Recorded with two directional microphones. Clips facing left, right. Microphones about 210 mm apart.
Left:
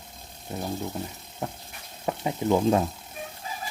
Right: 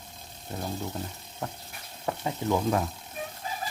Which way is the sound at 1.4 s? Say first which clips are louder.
Left 2 dB; 20° left (ahead or behind).